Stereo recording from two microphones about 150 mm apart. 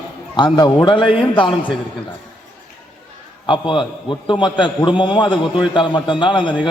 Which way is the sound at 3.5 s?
35° left (ahead or behind).